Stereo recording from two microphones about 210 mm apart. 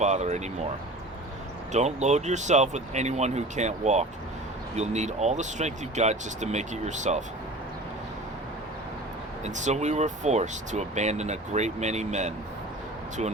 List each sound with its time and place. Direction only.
0.0 s speech: 35° right (ahead or behind)
1.7 s speech: 35° right (ahead or behind)
9.4 s speech: 35° right (ahead or behind)